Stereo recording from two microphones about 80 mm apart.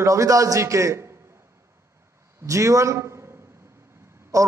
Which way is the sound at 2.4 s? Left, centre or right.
Right.